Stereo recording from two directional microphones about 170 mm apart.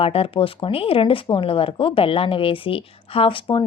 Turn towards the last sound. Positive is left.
turn(degrees=30)  # may be behind; listen again after turning